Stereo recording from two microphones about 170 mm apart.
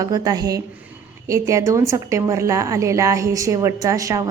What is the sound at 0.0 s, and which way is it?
A woman's voice, 20° right (ahead or behind).